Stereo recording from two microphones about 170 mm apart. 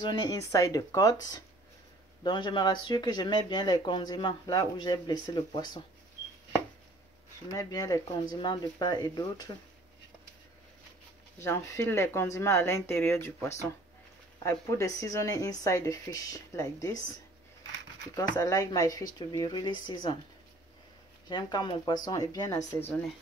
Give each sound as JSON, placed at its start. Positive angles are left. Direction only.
{"t": 0.0, "sound": "speech", "side_deg": 25}
{"t": 7.5, "sound": "speech", "side_deg": 20}
{"t": 11.3, "sound": "speech", "side_deg": 15}
{"t": 18.1, "sound": "speech", "side_deg": 20}
{"t": 21.3, "sound": "speech", "side_deg": 25}